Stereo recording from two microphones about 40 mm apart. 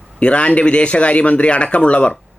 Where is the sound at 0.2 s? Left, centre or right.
Left.